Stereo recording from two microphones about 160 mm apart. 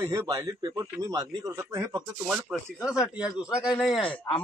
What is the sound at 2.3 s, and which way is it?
Speech, 5° right (ahead or behind).